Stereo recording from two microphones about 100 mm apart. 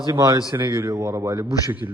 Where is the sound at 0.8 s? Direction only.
25° right (ahead or behind).